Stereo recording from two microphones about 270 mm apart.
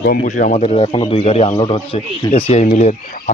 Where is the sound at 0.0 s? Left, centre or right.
Left.